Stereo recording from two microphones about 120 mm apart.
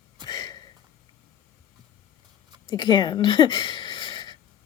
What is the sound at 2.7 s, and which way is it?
Speech, 40° left (ahead or behind).